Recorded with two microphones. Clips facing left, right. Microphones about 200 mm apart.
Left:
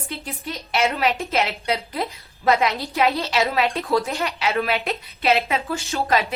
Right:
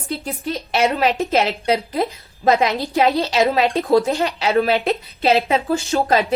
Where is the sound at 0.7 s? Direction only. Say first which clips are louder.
Right 3 dB; 35° right (ahead or behind).